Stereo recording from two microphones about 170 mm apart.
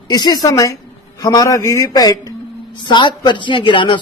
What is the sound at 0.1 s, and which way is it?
A man's voice, 25° left (ahead or behind).